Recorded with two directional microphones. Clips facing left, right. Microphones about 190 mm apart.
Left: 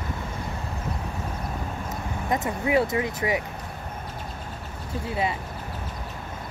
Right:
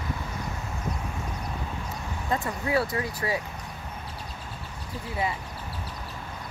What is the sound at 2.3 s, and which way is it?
Speech, 20° left (ahead or behind).